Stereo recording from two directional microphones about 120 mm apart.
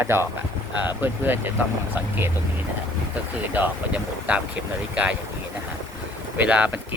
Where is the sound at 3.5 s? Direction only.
10° right (ahead or behind).